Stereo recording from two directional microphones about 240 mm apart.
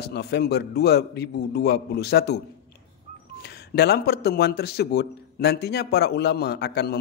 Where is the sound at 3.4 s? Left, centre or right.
Left.